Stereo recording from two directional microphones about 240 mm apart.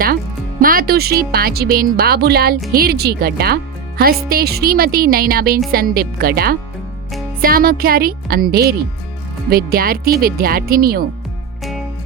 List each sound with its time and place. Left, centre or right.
0.6 s speech: right